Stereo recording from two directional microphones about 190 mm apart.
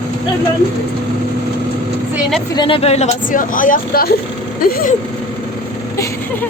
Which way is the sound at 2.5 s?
25° left (ahead or behind).